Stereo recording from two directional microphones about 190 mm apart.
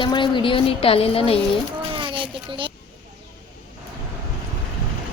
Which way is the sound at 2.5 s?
25° right (ahead or behind).